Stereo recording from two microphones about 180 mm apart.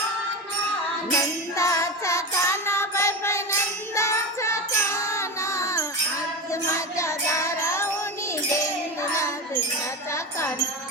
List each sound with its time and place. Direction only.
1.5 s music: 15° left (ahead or behind)
9.0 s music: 15° left (ahead or behind)